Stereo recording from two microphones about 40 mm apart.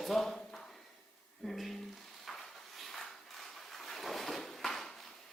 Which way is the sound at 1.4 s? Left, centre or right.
Centre.